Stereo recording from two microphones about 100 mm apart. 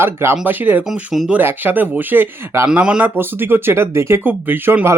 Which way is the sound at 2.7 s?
10° right (ahead or behind).